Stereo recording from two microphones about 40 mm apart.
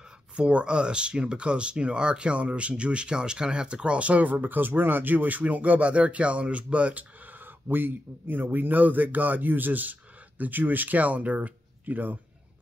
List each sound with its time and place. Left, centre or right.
0.4 s speech: right
7.6 s speech: right